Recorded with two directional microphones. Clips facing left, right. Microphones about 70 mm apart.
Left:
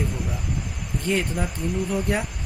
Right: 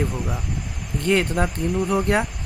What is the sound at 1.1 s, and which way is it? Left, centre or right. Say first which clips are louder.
Speech: right 5 dB; right.